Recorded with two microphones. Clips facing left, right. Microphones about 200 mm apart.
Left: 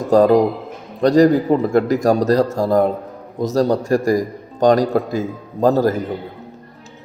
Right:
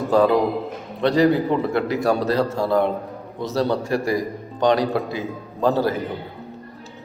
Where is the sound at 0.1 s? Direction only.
40° left (ahead or behind).